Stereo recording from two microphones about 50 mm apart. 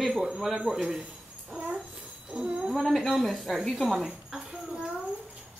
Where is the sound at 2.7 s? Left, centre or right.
Centre.